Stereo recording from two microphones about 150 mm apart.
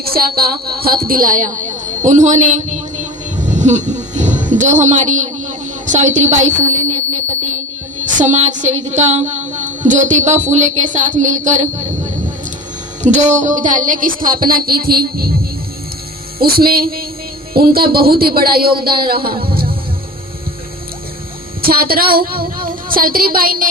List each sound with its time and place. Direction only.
0.0 s speech: 90° right
1.0 s a woman's voice: 70° right (ahead or behind); by 3.1 s 55° right (ahead or behind)
3.5 s a sound: 55° right (ahead or behind)
4.5 s a woman's voice: 55° right (ahead or behind)
8.0 s a woman's voice: 55° right (ahead or behind)
13.0 s a woman's voice: 55° right (ahead or behind); by 15.4 s 85° right
16.4 s a woman's voice: 85° right
21.6 s a woman's voice: 85° right